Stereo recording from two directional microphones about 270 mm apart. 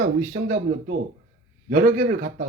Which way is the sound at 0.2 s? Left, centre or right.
Right.